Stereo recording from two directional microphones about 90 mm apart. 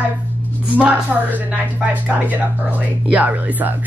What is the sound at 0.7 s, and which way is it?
A woman's voice, 15° right (ahead or behind).